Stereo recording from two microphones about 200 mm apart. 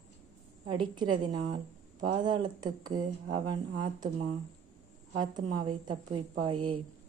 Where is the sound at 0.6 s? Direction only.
25° right (ahead or behind).